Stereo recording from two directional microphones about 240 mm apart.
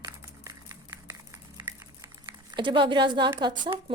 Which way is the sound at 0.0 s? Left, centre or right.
Centre.